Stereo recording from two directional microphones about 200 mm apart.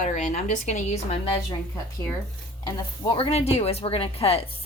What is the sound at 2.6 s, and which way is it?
Speech, 25° left (ahead or behind).